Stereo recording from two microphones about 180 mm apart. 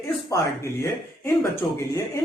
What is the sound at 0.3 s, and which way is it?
Speech, 15° left (ahead or behind).